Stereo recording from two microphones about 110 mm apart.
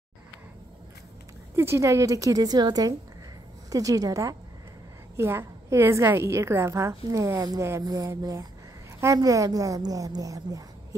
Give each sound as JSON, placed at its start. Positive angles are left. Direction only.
{"t": 1.6, "sound": "a woman's voice", "side_deg": -25}